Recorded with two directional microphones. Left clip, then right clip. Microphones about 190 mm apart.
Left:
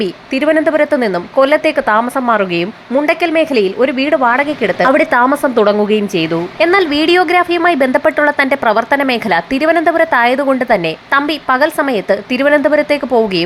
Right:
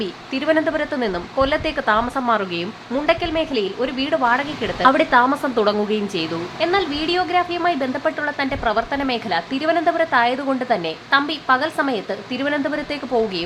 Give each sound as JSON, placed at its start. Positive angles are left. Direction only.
{"t": 0.3, "sound": "a woman's voice", "side_deg": 25}
{"t": 6.6, "sound": "a woman's voice", "side_deg": 35}